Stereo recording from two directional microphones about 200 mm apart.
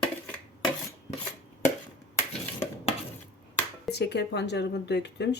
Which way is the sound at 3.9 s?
55° left (ahead or behind).